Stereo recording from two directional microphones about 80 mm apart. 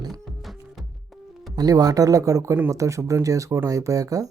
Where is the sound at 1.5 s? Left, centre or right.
Right.